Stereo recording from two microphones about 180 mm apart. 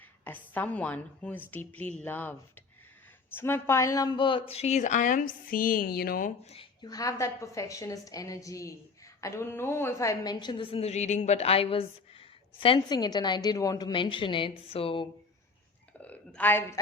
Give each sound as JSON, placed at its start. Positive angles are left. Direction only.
{"t": 0.3, "sound": "a woman's voice", "side_deg": 10}
{"t": 3.3, "sound": "a woman's voice", "side_deg": 10}
{"t": 6.4, "sound": "a woman's voice", "side_deg": 35}
{"t": 6.8, "sound": "a woman's voice", "side_deg": 20}
{"t": 16.0, "sound": "a sound", "side_deg": 10}